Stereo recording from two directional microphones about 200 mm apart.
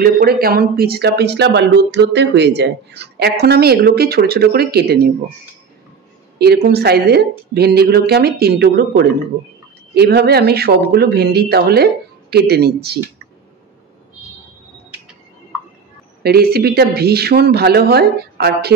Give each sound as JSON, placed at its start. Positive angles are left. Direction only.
{"t": 0.0, "sound": "speech", "side_deg": -50}
{"t": 6.3, "sound": "speech", "side_deg": -55}
{"t": 16.2, "sound": "speech", "side_deg": -50}